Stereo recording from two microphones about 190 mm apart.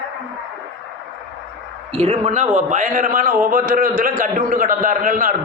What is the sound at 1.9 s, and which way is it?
A man's voice, 35° right (ahead or behind).